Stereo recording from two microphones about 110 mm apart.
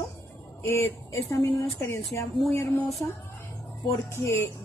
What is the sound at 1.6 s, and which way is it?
A woman's voice, 25° left (ahead or behind).